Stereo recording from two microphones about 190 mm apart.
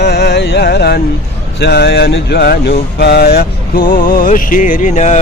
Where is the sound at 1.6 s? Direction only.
60° left (ahead or behind); by 5.2 s 35° left (ahead or behind).